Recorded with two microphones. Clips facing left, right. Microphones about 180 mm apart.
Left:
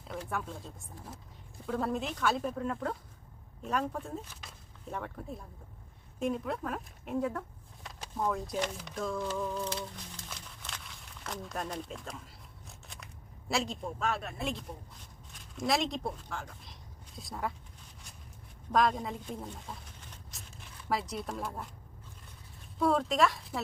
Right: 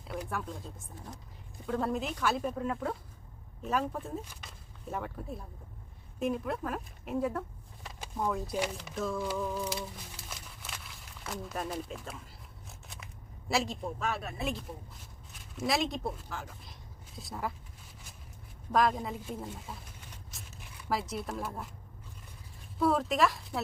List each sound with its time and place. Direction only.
0.1 s speech: 5° right (ahead or behind)
7.9 s a sound: centre (ahead or behind)
13.5 s speech: centre (ahead or behind)
18.7 s speech: centre (ahead or behind)
22.8 s speech: centre (ahead or behind)